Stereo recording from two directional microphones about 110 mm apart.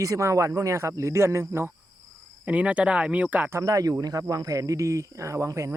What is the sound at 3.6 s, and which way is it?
Speech, 30° right (ahead or behind).